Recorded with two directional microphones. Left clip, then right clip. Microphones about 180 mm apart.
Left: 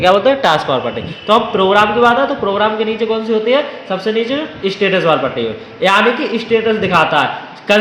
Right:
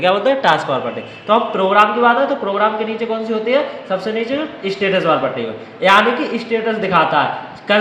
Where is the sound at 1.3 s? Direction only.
50° left (ahead or behind).